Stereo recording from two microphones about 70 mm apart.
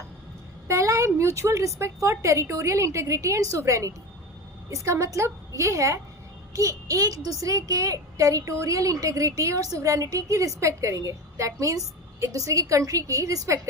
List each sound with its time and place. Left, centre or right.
0.7 s a woman's voice: right